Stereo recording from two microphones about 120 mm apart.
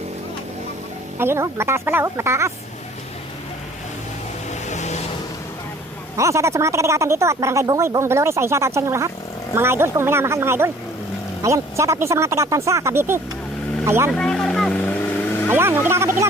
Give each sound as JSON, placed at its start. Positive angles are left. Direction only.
{"t": 1.2, "sound": "speech", "side_deg": -20}
{"t": 4.6, "sound": "vehicle", "side_deg": 75}
{"t": 6.1, "sound": "speech", "side_deg": -25}
{"t": 14.1, "sound": "vehicle", "side_deg": 5}
{"t": 15.4, "sound": "speech", "side_deg": -20}